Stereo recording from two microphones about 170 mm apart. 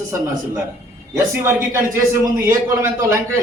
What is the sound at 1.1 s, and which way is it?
A man's voice, 15° right (ahead or behind).